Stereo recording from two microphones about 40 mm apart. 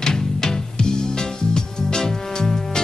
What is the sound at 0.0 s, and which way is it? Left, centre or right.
Music, centre.